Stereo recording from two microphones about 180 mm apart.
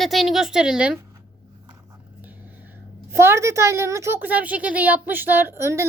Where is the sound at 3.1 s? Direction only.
15° right (ahead or behind).